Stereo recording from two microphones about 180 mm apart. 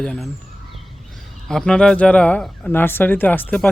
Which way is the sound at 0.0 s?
5° left (ahead or behind).